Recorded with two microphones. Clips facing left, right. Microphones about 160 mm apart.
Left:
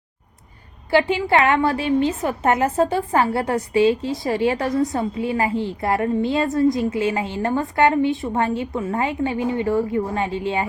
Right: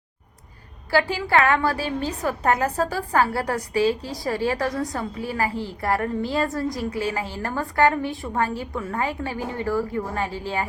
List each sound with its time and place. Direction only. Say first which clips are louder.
0.9 s a woman's voice: left 4 dB; 20° left (ahead or behind)